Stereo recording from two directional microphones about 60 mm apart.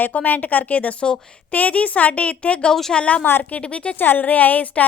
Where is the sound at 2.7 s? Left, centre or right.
Centre.